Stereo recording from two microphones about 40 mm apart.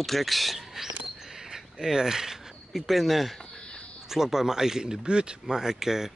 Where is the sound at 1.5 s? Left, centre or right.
Centre.